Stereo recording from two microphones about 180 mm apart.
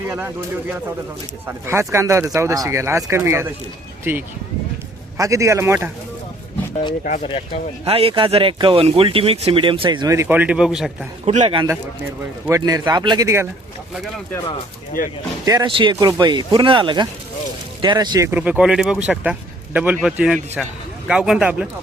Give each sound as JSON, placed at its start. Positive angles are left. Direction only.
{"t": 1.5, "sound": "speech", "side_deg": -15}
{"t": 5.1, "sound": "speech", "side_deg": -15}
{"t": 7.0, "sound": "speech", "side_deg": 45}
{"t": 7.9, "sound": "speech", "side_deg": -30}
{"t": 11.3, "sound": "a man's voice", "side_deg": -35}
{"t": 12.5, "sound": "speech", "side_deg": -20}
{"t": 15.4, "sound": "speech", "side_deg": -25}
{"t": 18.3, "sound": "a man's voice", "side_deg": -10}